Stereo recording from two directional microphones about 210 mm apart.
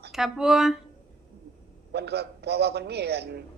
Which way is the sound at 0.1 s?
Centre (ahead or behind).